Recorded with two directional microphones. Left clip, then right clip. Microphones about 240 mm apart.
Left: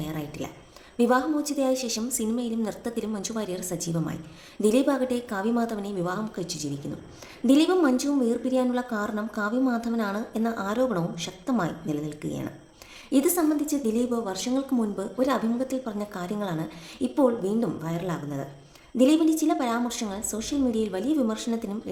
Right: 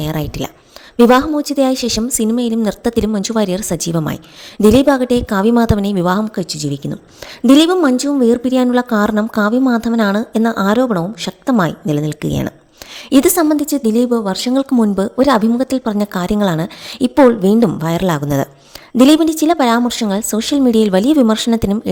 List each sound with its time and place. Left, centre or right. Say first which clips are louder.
0.0 s a woman's voice: right 13 dB; right